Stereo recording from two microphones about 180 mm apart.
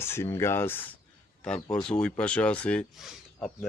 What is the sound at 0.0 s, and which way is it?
Speech, 15° left (ahead or behind).